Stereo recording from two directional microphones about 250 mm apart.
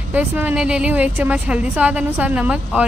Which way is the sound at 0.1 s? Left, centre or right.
Centre.